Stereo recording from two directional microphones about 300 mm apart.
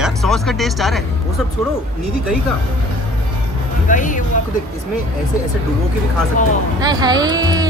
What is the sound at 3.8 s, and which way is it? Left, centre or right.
Speech, left.